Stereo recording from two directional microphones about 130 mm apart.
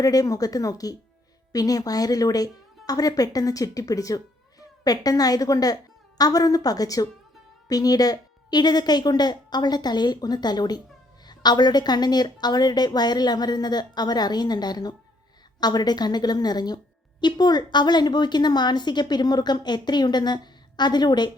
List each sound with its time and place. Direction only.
0.0 s a woman's voice: 30° left (ahead or behind)